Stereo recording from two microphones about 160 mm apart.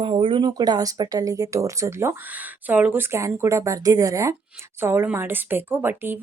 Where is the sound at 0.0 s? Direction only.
35° right (ahead or behind).